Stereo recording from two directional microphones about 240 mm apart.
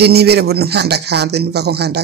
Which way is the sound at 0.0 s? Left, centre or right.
Right.